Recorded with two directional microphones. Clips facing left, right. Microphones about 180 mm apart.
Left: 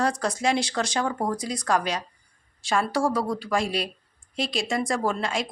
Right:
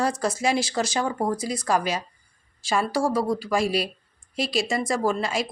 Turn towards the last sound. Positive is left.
turn(degrees=-5)  # may be behind; listen again after turning